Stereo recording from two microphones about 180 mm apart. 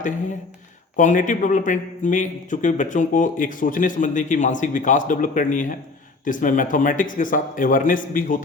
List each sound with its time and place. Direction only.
0.9 s a man's voice: 45° left (ahead or behind)